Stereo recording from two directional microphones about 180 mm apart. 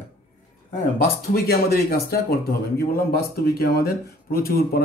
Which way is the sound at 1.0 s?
60° left (ahead or behind).